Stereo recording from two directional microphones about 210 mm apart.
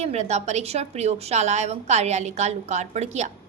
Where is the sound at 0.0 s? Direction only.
30° right (ahead or behind).